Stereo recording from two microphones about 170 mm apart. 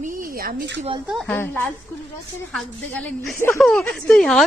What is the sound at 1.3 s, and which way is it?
Speech, 10° left (ahead or behind).